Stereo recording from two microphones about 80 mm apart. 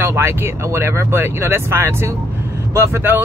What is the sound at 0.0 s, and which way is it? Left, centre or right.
Speech, right.